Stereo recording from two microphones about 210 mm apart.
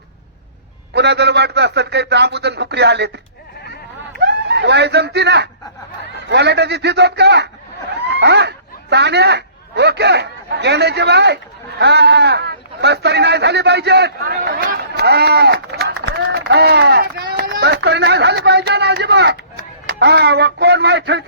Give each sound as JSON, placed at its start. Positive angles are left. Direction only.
{"t": 0.9, "sound": "speech", "side_deg": -55}
{"t": 4.2, "sound": "a man's voice", "side_deg": -55}